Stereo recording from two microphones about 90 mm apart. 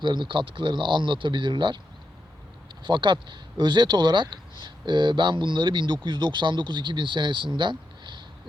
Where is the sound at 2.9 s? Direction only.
60° right (ahead or behind).